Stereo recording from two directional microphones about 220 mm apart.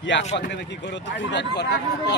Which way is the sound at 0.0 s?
55° left (ahead or behind).